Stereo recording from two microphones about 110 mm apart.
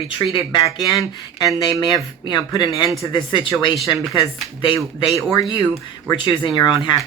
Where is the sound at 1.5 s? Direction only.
30° left (ahead or behind); by 3.5 s 50° left (ahead or behind).